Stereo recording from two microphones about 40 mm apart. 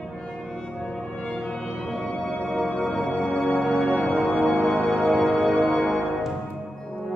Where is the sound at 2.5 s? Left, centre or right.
Centre.